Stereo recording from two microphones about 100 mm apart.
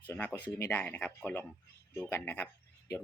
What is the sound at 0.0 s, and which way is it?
Speech, 20° left (ahead or behind).